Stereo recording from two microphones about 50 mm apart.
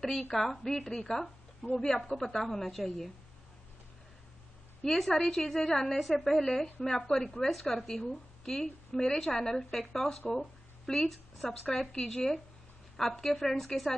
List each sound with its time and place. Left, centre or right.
0.0 s a woman's voice: centre
4.8 s a woman's voice: centre